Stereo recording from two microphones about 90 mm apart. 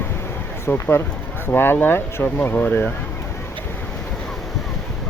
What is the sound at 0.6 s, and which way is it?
Speech, 25° left (ahead or behind).